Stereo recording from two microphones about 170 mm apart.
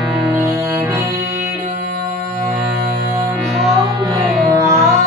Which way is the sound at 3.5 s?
Centre (ahead or behind).